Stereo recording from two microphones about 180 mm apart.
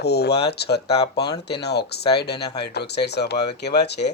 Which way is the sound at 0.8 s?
35° left (ahead or behind).